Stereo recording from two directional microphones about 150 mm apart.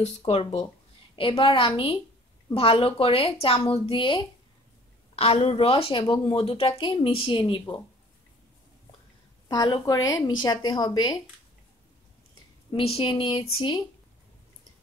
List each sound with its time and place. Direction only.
0.0 s a woman's voice: 40° left (ahead or behind)
9.5 s a woman's voice: 30° left (ahead or behind)
12.7 s a woman's voice: 40° left (ahead or behind)